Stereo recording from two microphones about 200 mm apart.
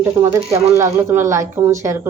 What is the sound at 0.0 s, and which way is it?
Speech, 15° right (ahead or behind).